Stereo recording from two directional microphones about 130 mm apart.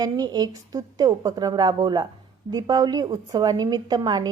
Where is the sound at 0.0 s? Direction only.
30° right (ahead or behind).